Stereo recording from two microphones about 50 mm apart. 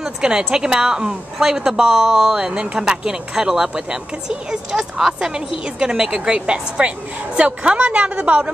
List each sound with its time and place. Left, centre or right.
0.0 s a woman's voice: centre
5.3 s a woman's voice: centre